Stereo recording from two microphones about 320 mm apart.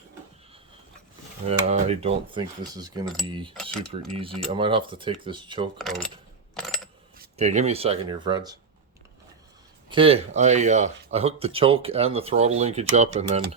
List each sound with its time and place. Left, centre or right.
1.5 s speech: centre
3.5 s cutlery: centre
4.5 s speech: centre
5.7 s cutlery: centre
6.5 s a sound: centre
7.3 s speech: right
9.9 s speech: centre